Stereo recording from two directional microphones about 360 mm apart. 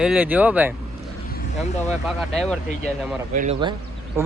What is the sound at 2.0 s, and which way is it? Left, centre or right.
Speech, centre.